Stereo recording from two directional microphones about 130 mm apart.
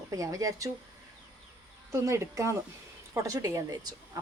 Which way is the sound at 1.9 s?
20° right (ahead or behind).